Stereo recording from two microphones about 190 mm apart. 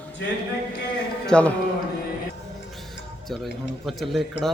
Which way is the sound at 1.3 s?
5° left (ahead or behind).